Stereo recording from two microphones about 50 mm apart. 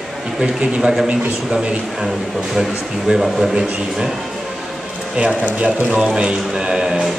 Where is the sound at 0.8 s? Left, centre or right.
Centre.